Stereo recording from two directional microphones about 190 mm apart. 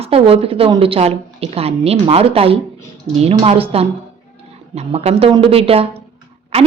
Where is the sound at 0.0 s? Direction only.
30° right (ahead or behind).